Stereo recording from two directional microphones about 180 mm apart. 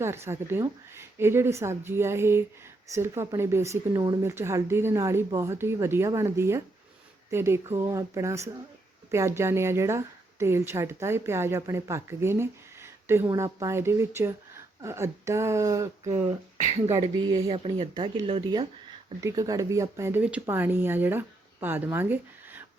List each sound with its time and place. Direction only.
0.0 s speech: 15° right (ahead or behind)
16.9 s speech: 20° right (ahead or behind)
19.2 s speech: 20° right (ahead or behind)